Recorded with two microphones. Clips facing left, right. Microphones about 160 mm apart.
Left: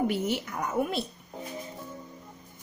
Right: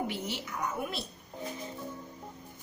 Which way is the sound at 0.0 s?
50° left (ahead or behind).